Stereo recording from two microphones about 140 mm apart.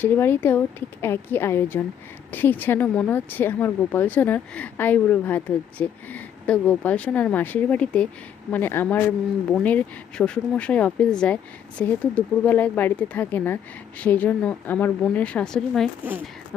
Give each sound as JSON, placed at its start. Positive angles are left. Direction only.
{"t": 0.0, "sound": "a woman's voice", "side_deg": 15}